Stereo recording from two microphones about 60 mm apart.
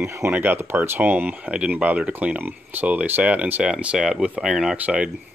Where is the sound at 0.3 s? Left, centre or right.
Right.